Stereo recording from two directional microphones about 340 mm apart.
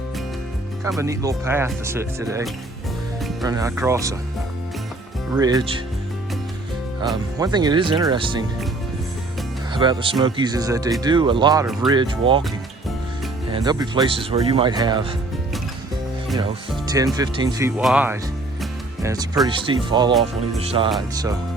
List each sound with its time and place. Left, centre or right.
0.9 s speech: centre
5.3 s speech: centre
7.3 s speech: centre
9.7 s speech: centre
13.5 s speech: centre
16.4 s speech: centre
18.6 s music: centre
19.5 s speech: centre